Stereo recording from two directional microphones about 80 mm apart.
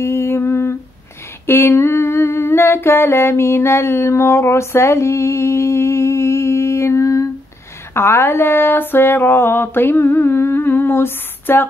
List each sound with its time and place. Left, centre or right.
0.0 s humming: left
7.9 s speech: left